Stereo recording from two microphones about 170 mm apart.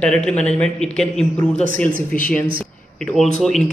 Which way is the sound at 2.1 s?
50° left (ahead or behind).